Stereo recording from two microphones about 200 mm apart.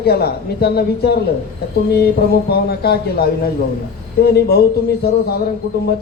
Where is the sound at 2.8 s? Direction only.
55° left (ahead or behind).